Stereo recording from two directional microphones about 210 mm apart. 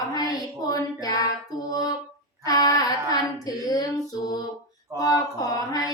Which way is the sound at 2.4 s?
15° left (ahead or behind).